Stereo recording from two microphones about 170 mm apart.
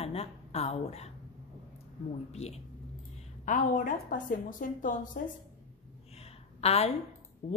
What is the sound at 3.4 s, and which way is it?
A woman's voice, 50° left (ahead or behind).